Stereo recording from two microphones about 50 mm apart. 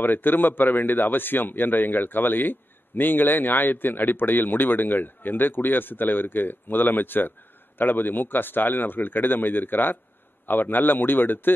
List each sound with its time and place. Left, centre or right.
0.0 s a man's voice: left